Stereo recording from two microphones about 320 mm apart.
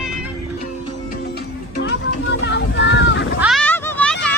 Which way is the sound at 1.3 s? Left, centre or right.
Left.